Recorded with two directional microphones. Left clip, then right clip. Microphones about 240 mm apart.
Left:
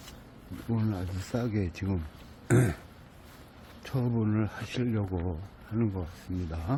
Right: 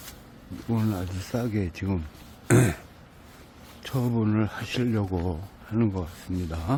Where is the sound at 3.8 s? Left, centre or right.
Centre.